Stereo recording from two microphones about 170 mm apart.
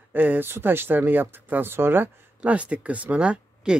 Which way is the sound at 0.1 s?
10° right (ahead or behind).